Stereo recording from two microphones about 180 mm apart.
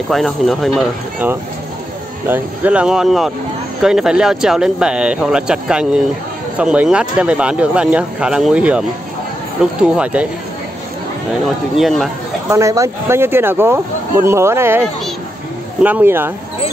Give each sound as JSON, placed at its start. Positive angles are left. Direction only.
{"t": 0.1, "sound": "speech", "side_deg": 0}
{"t": 2.2, "sound": "speech", "side_deg": -10}
{"t": 11.7, "sound": "speech", "side_deg": 0}
{"t": 12.4, "sound": "speech", "side_deg": -15}